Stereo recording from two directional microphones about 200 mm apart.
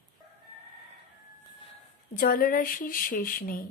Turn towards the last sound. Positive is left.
turn(degrees=45)  # may be behind; listen again after turning